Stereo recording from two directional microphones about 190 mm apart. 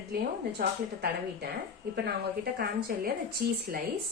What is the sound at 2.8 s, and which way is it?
Speech, 55° right (ahead or behind).